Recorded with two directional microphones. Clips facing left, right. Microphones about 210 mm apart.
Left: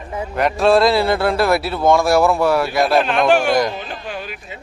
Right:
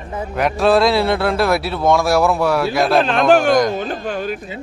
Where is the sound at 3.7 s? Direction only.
45° right (ahead or behind).